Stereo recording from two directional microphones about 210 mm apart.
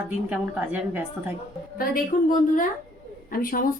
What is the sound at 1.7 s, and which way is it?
Speech, 40° left (ahead or behind).